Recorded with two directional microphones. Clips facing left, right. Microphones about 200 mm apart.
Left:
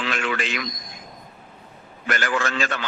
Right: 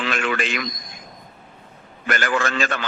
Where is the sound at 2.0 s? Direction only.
55° right (ahead or behind).